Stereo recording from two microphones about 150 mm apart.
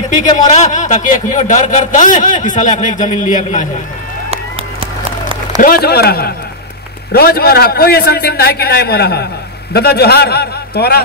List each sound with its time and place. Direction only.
0.5 s a man's voice: 55° left (ahead or behind)
5.6 s a man's voice: 85° left